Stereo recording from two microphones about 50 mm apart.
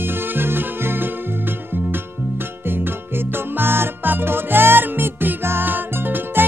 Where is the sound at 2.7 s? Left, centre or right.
Right.